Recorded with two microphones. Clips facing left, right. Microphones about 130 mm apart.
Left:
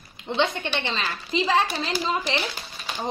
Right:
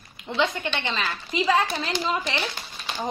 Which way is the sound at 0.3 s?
25° left (ahead or behind).